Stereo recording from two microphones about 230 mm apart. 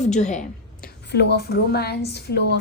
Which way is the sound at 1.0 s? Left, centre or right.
Left.